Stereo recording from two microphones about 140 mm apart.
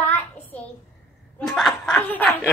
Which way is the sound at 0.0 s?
10° left (ahead or behind).